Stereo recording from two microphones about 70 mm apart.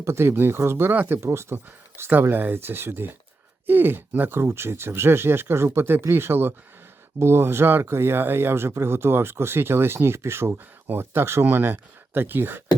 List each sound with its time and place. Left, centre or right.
0.0 s speech: right
1.2 s speech: right